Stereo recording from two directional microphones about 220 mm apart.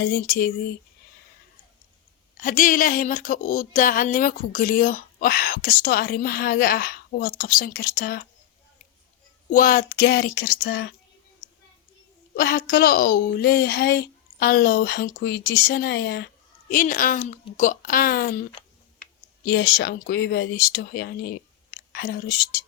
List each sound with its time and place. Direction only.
0.0 s a woman's voice: 45° left (ahead or behind)
2.4 s speech: 35° left (ahead or behind)
9.5 s a woman's voice: 40° left (ahead or behind); by 10.9 s 55° left (ahead or behind)
12.4 s a woman's voice: 40° left (ahead or behind)
19.5 s speech: 45° left (ahead or behind)